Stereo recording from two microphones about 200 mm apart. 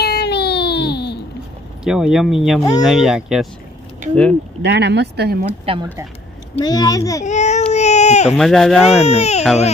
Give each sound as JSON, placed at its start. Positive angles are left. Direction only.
{"t": 0.0, "sound": "baby cry", "side_deg": 55}
{"t": 1.8, "sound": "speech", "side_deg": -5}
{"t": 4.6, "sound": "speech", "side_deg": -60}
{"t": 5.6, "sound": "speech", "side_deg": -25}
{"t": 6.6, "sound": "a child's voice", "side_deg": 20}
{"t": 7.3, "sound": "speech", "side_deg": 35}
{"t": 8.3, "sound": "speech", "side_deg": 0}
{"t": 9.0, "sound": "speech", "side_deg": 30}